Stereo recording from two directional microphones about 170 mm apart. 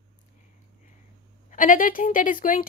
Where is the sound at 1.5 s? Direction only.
55° left (ahead or behind).